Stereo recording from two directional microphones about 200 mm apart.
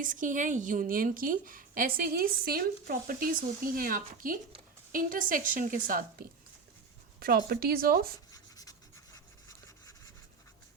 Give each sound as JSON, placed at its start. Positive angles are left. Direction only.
{"t": 0.0, "sound": "a woman's voice", "side_deg": -40}
{"t": 8.3, "sound": "writing", "side_deg": 15}